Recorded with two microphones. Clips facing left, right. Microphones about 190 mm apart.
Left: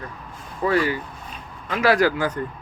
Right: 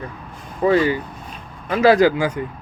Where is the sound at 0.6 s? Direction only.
20° right (ahead or behind).